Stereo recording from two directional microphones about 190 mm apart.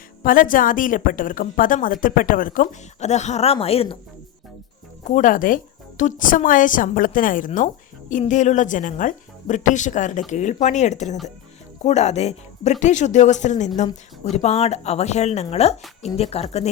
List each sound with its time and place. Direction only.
0.2 s a woman's voice: 45° left (ahead or behind); by 3.9 s 30° left (ahead or behind)
5.0 s a woman's voice: 45° left (ahead or behind)